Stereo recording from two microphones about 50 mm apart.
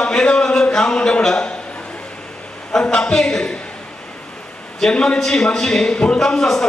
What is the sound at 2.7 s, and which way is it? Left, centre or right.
Speech, centre.